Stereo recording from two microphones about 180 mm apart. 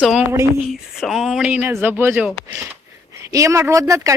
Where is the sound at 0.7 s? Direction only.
Centre (ahead or behind).